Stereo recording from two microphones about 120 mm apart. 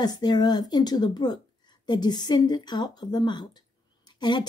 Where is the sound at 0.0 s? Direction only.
35° left (ahead or behind).